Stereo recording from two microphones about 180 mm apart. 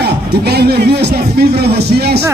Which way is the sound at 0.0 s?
65° right (ahead or behind).